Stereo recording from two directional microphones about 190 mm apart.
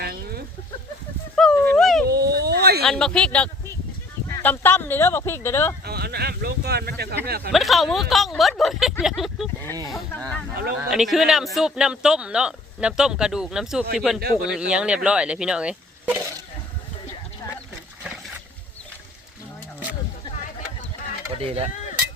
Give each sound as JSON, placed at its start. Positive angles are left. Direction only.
{"t": 0.0, "sound": "chicken", "side_deg": -55}
{"t": 1.4, "sound": "a sound", "side_deg": 5}
{"t": 1.7, "sound": "dog", "side_deg": 0}
{"t": 2.0, "sound": "a sound", "side_deg": -55}
{"t": 2.8, "sound": "speech", "side_deg": 5}
{"t": 5.8, "sound": "speech", "side_deg": -55}
{"t": 7.5, "sound": "speech", "side_deg": 0}
{"t": 21.4, "sound": "speech", "side_deg": -30}